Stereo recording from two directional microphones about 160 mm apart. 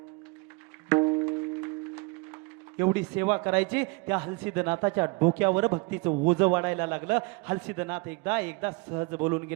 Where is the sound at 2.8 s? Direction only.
15° right (ahead or behind).